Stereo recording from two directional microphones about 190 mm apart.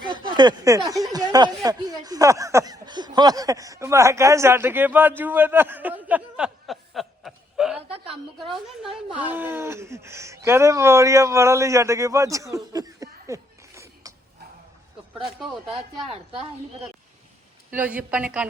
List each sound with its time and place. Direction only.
0.3 s speech: 20° right (ahead or behind); by 7.8 s 5° right (ahead or behind)
7.9 s a sound: 30° right (ahead or behind)
8.4 s speech: centre (ahead or behind)
12.7 s chuckle: 20° right (ahead or behind)
15.1 s speech: centre (ahead or behind)
15.7 s a woman's voice: 30° right (ahead or behind)
17.7 s speech: 10° right (ahead or behind)